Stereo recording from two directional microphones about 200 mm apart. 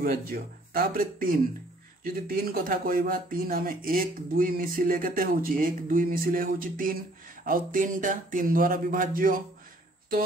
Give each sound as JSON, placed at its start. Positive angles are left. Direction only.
{"t": 0.0, "sound": "speech", "side_deg": -50}